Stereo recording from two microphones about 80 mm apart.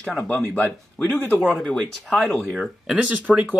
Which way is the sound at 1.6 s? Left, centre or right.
Centre.